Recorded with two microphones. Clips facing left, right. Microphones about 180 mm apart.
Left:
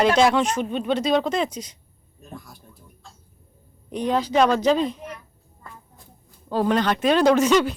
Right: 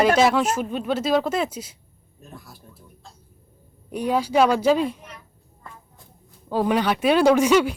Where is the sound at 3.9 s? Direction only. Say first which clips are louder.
Even; 10° right (ahead or behind).